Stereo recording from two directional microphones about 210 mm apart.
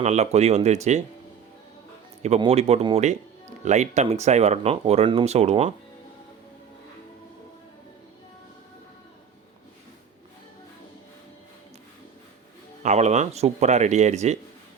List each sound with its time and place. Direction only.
0.0 s speech: 30° right (ahead or behind)
2.2 s speech: 30° right (ahead or behind)
12.8 s speech: 35° right (ahead or behind)